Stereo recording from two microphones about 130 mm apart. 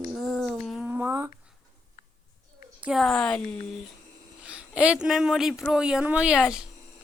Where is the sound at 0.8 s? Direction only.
15° right (ahead or behind).